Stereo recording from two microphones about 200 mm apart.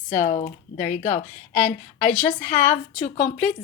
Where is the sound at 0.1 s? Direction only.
40° left (ahead or behind).